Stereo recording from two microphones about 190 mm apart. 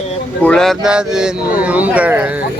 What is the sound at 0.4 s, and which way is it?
Speech, 5° left (ahead or behind).